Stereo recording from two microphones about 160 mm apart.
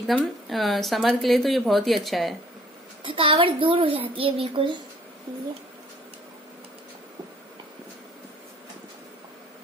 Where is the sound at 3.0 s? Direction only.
35° right (ahead or behind).